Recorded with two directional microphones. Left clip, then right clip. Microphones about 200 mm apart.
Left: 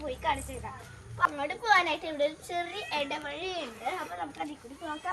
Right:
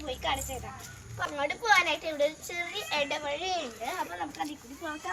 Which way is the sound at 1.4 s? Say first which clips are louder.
Right 4 dB; 15° left (ahead or behind).